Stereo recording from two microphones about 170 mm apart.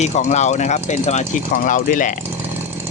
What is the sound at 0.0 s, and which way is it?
Speech, 45° left (ahead or behind).